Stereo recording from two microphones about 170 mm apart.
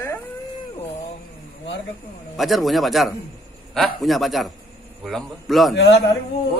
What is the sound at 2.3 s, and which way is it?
A man's voice, centre (ahead or behind).